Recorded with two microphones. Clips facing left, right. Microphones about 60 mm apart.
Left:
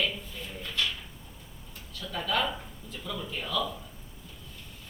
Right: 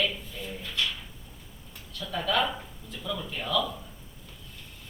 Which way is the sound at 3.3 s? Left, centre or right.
Right.